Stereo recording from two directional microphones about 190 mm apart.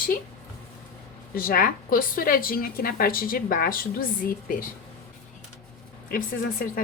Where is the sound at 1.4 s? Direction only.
50° left (ahead or behind).